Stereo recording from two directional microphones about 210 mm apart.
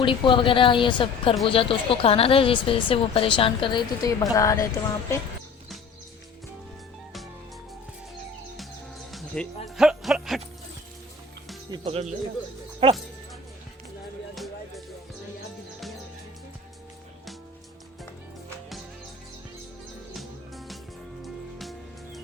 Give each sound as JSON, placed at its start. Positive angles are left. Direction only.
{"t": 0.0, "sound": "a woman's voice", "side_deg": 25}
{"t": 9.1, "sound": "music", "side_deg": 5}
{"t": 11.7, "sound": "speech", "side_deg": -25}
{"t": 14.3, "sound": "music", "side_deg": 0}
{"t": 21.2, "sound": "music", "side_deg": 0}